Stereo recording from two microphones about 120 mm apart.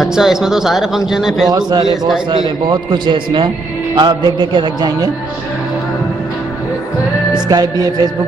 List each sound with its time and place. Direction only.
0.0 s speech: 5° right (ahead or behind)
1.7 s a man's voice: 40° right (ahead or behind)
7.4 s a man's voice: 35° right (ahead or behind)